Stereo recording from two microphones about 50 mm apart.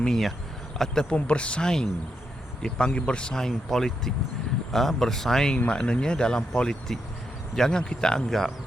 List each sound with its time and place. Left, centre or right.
0.0 s speech: centre
1.1 s speech: left
5.5 s speech: centre